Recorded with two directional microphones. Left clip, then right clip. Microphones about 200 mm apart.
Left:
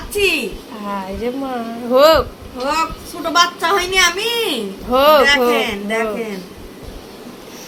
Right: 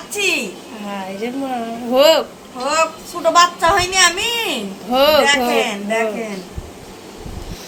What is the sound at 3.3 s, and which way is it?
A woman's voice, 20° right (ahead or behind).